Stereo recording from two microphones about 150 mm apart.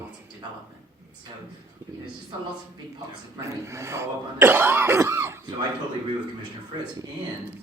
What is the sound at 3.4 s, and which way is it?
Speech, 20° right (ahead or behind).